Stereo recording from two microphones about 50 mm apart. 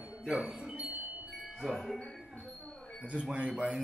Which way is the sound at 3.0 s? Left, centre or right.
Right.